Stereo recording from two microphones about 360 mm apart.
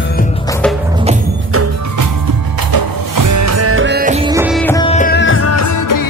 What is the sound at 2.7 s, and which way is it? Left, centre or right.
Music, right.